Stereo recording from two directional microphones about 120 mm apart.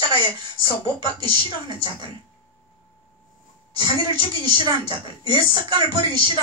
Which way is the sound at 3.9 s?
50° left (ahead or behind).